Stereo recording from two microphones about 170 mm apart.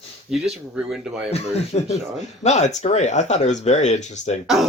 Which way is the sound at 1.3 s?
40° left (ahead or behind).